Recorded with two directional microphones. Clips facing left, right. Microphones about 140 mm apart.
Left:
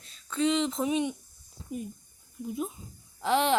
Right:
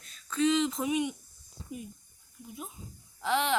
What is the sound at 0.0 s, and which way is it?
Speech, 25° left (ahead or behind).